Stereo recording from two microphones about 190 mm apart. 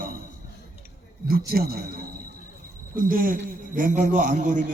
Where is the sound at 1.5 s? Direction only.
55° right (ahead or behind).